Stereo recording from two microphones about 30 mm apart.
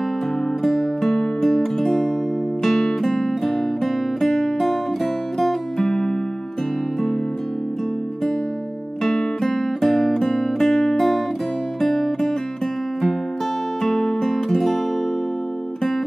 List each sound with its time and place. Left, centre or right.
1.0 s music: centre
9.0 s music: centre
11.0 s guitar: centre
11.8 s music: centre
13.8 s music: centre